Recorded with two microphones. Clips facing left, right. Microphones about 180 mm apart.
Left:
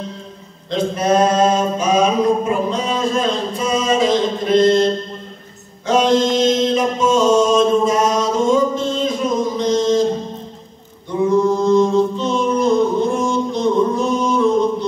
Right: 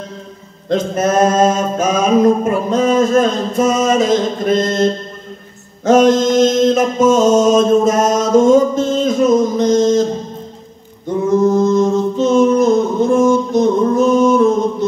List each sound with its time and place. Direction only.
0.7 s mantra: 45° right (ahead or behind)
5.9 s mantra: 45° right (ahead or behind)
11.2 s mantra: 45° right (ahead or behind)
13.2 s music: 45° right (ahead or behind)